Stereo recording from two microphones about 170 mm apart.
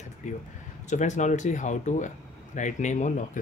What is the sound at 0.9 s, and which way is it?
Speech, 45° left (ahead or behind).